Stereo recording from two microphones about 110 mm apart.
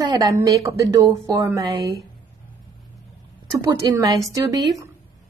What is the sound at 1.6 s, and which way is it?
Speech, 45° right (ahead or behind).